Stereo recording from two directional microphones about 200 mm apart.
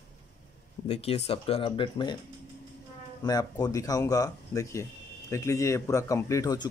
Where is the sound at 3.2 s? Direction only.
20° left (ahead or behind).